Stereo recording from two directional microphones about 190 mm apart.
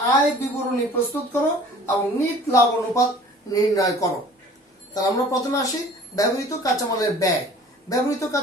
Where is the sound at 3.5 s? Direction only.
15° left (ahead or behind).